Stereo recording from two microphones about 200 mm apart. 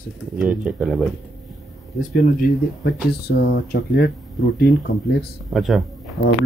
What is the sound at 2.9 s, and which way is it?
Speech, 50° left (ahead or behind).